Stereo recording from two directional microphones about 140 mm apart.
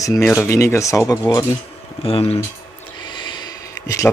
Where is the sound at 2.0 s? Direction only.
45° left (ahead or behind).